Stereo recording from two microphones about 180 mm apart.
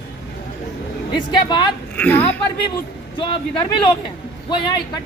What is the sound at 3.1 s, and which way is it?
Speech, 25° left (ahead or behind).